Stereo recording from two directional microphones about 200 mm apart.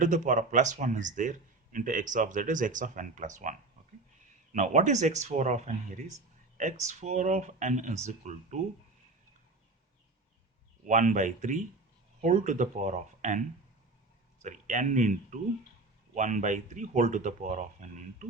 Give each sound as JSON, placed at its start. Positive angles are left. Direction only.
{"t": 0.0, "sound": "a man's voice", "side_deg": -40}
{"t": 4.5, "sound": "a man's voice", "side_deg": -35}
{"t": 10.8, "sound": "a man's voice", "side_deg": -40}
{"t": 14.4, "sound": "a man's voice", "side_deg": -40}